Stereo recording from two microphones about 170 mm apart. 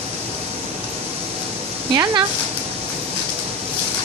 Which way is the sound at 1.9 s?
25° right (ahead or behind).